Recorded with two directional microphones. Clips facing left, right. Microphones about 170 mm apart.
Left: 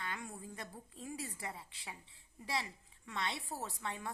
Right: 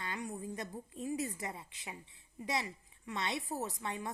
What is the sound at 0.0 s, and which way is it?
A woman's voice, 15° right (ahead or behind).